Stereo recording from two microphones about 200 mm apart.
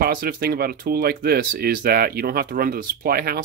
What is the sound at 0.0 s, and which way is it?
Speech, 45° right (ahead or behind).